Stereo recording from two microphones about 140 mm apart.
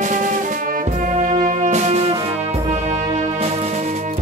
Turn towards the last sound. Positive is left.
turn(degrees=-60)  # may be behind; listen again after turning